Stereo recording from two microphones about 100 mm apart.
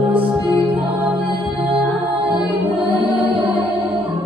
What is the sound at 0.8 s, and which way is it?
Music, 15° right (ahead or behind).